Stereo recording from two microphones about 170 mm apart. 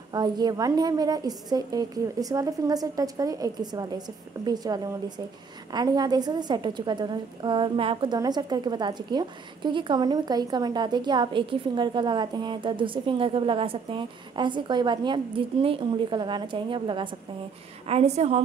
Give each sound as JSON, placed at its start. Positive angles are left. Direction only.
{"t": 0.1, "sound": "a woman's voice", "side_deg": -25}